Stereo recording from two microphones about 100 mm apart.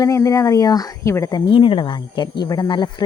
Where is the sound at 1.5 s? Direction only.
55° left (ahead or behind).